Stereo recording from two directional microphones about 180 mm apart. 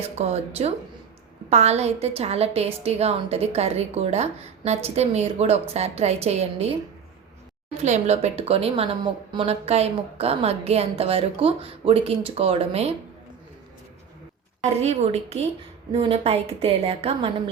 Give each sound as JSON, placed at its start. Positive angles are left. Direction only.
{"t": 0.0, "sound": "a woman's voice", "side_deg": -35}
{"t": 7.8, "sound": "a woman's voice", "side_deg": -40}
{"t": 14.6, "sound": "a woman's voice", "side_deg": -35}